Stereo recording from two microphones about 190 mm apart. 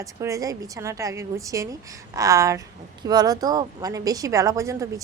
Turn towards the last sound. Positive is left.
turn(degrees=-15)  # may be behind; listen again after turning